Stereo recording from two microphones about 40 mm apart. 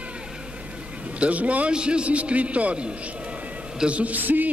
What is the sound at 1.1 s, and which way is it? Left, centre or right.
Speech, right.